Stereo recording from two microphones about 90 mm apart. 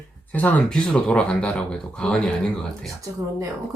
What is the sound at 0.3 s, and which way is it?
Speech, 20° left (ahead or behind).